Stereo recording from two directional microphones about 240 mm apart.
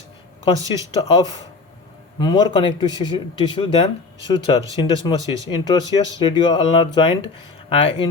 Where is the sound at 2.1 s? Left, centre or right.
Centre.